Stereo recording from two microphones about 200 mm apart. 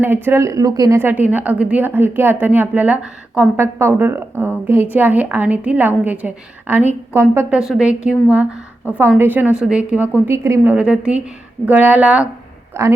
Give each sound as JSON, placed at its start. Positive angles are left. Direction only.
{"t": 0.0, "sound": "a woman's voice", "side_deg": -10}